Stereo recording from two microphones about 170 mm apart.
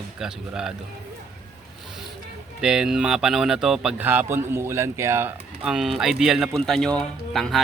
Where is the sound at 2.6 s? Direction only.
5° right (ahead or behind).